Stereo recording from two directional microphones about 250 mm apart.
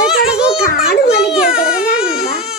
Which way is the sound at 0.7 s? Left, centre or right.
Left.